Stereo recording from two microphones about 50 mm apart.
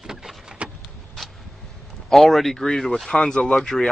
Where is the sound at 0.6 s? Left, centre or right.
Right.